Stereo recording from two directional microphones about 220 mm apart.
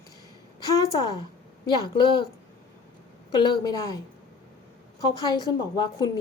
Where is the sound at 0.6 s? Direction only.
15° left (ahead or behind).